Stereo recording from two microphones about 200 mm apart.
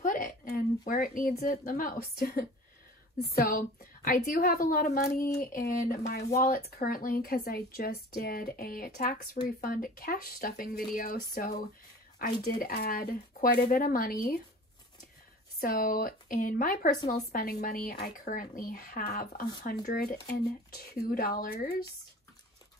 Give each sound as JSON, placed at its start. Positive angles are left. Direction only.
{"t": 0.0, "sound": "a woman's voice", "side_deg": 45}
{"t": 15.6, "sound": "speech", "side_deg": 45}